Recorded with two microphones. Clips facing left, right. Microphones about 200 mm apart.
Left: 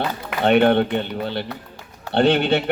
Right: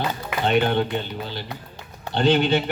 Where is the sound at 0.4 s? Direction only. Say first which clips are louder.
Left 5 dB; 60° left (ahead or behind).